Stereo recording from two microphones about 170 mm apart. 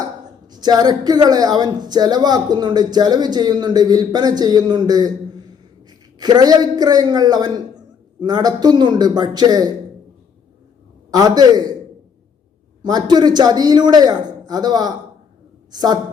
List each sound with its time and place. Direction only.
0.5 s speech: 25° right (ahead or behind)
6.1 s speech: 25° right (ahead or behind)
11.1 s speech: 20° right (ahead or behind)
12.8 s speech: 25° right (ahead or behind)